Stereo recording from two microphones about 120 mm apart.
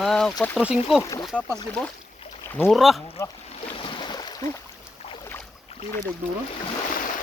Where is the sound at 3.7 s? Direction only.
45° left (ahead or behind).